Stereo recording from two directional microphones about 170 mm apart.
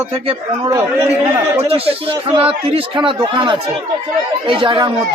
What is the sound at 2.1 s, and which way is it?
Speech, 30° right (ahead or behind).